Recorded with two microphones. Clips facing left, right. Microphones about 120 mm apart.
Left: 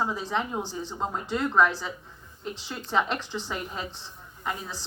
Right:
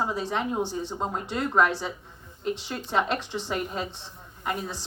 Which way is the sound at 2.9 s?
55° right (ahead or behind).